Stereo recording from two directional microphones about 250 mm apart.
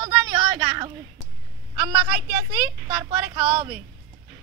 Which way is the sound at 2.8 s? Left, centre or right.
Centre.